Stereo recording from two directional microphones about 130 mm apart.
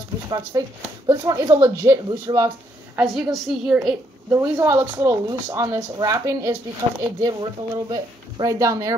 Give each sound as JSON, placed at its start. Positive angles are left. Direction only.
{"t": 0.3, "sound": "speech", "side_deg": -30}
{"t": 3.0, "sound": "a woman's voice", "side_deg": 0}
{"t": 4.3, "sound": "speech", "side_deg": -25}